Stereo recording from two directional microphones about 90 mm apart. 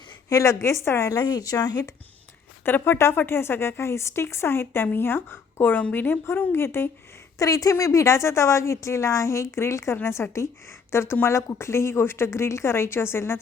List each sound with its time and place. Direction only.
0.3 s a woman's voice: 35° left (ahead or behind)
1.2 s speech: 45° left (ahead or behind)
2.6 s speech: 25° left (ahead or behind)
7.3 s a woman's voice: 40° left (ahead or behind)